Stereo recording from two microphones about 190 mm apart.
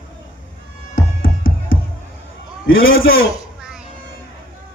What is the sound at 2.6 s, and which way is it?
Speech, 90° left.